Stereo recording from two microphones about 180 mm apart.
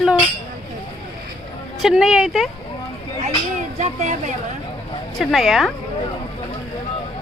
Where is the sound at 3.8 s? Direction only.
40° right (ahead or behind).